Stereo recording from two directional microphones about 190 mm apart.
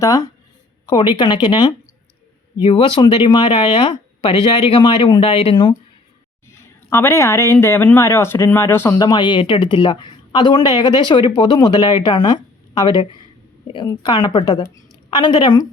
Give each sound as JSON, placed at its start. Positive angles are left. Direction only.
{"t": 0.0, "sound": "speech", "side_deg": 15}
{"t": 6.9, "sound": "speech", "side_deg": 15}